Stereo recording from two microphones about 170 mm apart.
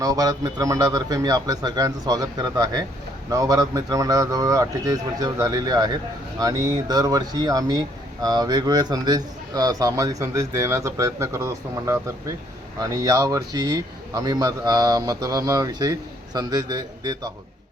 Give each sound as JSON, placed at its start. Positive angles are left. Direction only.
{"t": 0.0, "sound": "speech", "side_deg": -20}